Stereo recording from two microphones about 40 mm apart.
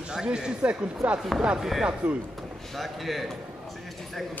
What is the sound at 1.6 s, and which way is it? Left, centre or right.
Speech, centre.